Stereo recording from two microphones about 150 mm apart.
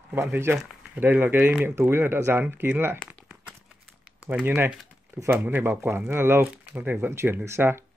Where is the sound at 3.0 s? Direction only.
5° right (ahead or behind).